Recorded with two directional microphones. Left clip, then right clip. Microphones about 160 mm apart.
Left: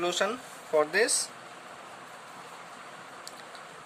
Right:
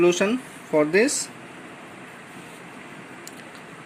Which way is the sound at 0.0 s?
25° right (ahead or behind).